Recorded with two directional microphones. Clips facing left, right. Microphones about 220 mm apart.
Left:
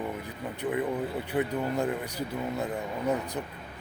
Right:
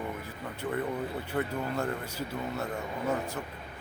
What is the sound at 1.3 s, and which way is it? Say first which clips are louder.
Speech: left 4 dB; 15° left (ahead or behind).